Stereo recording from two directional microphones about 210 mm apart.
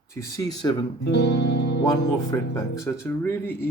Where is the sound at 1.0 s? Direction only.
55° left (ahead or behind).